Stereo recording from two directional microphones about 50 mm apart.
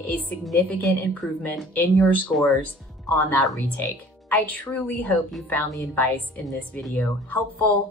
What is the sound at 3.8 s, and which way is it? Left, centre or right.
A woman's voice, left.